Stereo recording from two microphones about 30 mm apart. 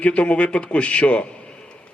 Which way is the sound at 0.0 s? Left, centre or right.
Left.